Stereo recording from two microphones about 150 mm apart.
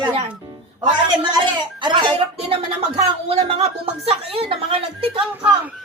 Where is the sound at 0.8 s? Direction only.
30° right (ahead or behind).